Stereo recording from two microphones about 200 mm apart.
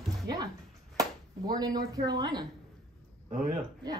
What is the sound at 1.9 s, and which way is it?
Speech, 20° right (ahead or behind).